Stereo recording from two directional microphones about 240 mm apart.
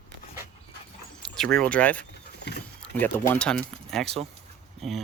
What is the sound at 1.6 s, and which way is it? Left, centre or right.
Speech, centre.